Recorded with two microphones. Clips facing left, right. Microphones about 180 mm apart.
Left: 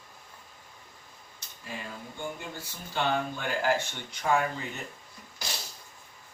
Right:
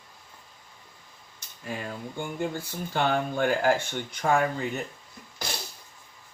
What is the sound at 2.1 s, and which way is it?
Speech, 50° right (ahead or behind).